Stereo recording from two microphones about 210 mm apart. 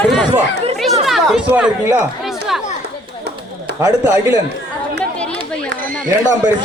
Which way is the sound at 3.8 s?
15° right (ahead or behind).